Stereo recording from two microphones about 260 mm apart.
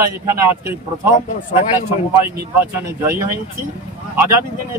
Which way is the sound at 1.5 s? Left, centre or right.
Left.